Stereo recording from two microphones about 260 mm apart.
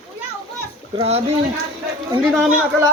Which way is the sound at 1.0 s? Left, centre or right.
Right.